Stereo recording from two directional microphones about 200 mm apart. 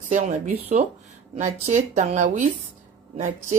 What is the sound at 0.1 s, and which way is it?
A woman's voice, 35° right (ahead or behind).